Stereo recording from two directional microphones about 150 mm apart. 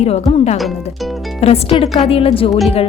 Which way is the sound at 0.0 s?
45° left (ahead or behind).